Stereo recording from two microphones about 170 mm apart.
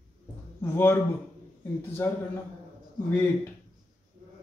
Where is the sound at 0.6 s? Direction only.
15° left (ahead or behind).